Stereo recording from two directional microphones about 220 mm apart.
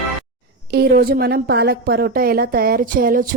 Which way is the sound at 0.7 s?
45° right (ahead or behind).